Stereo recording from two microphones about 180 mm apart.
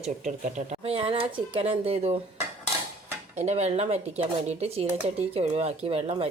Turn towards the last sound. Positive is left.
turn(degrees=-35)  # may be behind; listen again after turning